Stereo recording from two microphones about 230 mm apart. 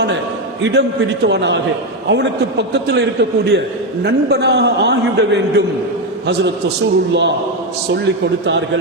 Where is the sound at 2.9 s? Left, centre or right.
Right.